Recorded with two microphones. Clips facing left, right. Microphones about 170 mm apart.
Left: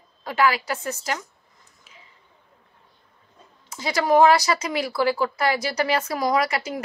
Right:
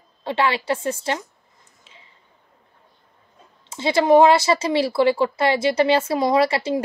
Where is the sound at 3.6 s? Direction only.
25° right (ahead or behind).